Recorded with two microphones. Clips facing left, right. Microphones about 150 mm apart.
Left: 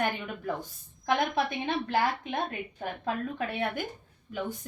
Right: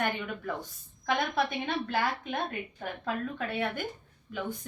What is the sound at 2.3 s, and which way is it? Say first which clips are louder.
A woman's voice: left 1 dB; 20° left (ahead or behind).